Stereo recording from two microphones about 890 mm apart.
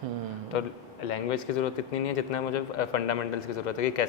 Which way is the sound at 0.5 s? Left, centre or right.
Left.